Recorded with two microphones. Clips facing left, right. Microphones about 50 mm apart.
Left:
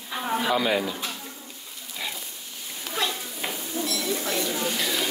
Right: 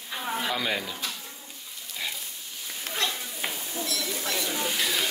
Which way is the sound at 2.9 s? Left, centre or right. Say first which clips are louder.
Left 2 dB; centre.